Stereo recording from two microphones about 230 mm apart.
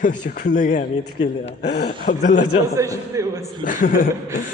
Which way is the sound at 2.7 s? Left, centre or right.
Centre.